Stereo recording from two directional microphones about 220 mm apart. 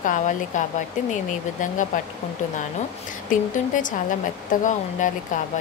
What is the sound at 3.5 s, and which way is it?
Speech, 35° left (ahead or behind).